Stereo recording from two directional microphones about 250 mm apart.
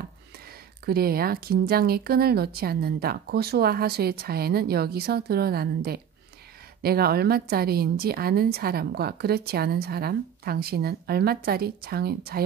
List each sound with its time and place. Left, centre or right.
0.8 s speech: right